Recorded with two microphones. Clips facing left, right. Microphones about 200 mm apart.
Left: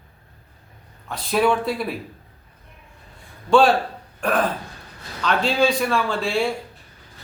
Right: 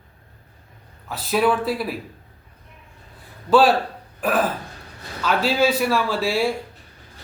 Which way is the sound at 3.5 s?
5° right (ahead or behind).